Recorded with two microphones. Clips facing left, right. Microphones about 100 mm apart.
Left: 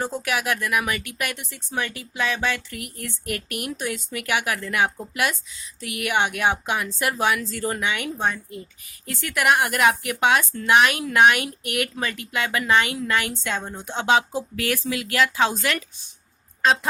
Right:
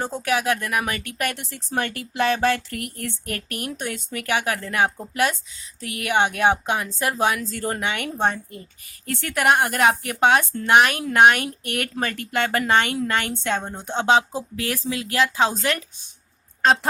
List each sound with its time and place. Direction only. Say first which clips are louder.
0.3 s speech: right 4 dB; 35° right (ahead or behind)